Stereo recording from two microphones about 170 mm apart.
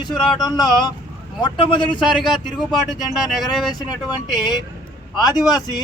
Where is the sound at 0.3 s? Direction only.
25° left (ahead or behind).